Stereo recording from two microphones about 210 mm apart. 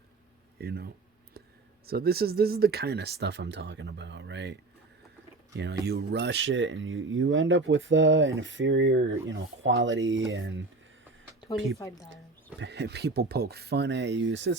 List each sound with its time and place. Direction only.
0.6 s a sound: 50° right (ahead or behind)
1.9 s speech: 45° right (ahead or behind)
5.5 s speech: 55° right (ahead or behind)
12.1 s speech: 55° right (ahead or behind)